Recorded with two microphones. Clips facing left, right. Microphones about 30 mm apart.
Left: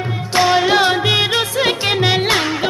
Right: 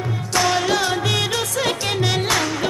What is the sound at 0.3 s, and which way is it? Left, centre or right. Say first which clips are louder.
Music: left 5 dB; left.